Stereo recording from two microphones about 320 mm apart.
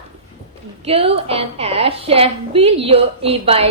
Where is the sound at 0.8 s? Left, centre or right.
Centre.